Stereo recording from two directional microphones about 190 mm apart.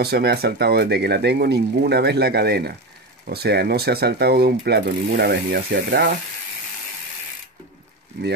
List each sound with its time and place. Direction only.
0.0 s speech: 55° right (ahead or behind)